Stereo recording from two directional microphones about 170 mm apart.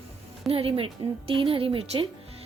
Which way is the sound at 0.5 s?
30° right (ahead or behind).